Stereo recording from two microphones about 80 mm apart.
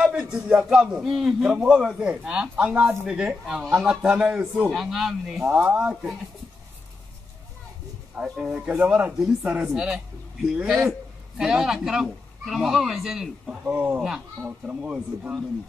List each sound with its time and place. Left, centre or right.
0.0 s a man's voice: centre
5.5 s a man's voice: centre
8.2 s a man's voice: centre
13.7 s a man's voice: centre